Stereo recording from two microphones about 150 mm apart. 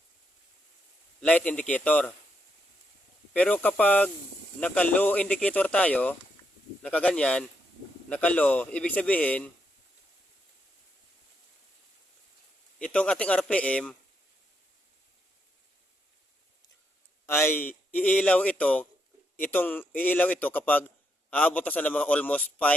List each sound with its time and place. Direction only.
1.2 s a man's voice: 10° left (ahead or behind)
3.3 s a man's voice: 10° left (ahead or behind)
12.8 s a man's voice: 5° left (ahead or behind)
17.2 s a man's voice: 15° left (ahead or behind)